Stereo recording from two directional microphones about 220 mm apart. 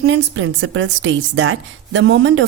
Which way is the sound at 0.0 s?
55° right (ahead or behind).